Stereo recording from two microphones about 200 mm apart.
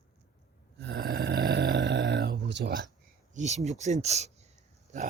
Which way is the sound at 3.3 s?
35° right (ahead or behind).